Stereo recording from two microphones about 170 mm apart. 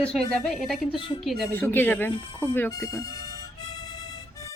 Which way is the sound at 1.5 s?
10° left (ahead or behind).